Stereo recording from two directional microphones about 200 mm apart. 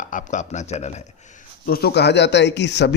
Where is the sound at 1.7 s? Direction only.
50° left (ahead or behind).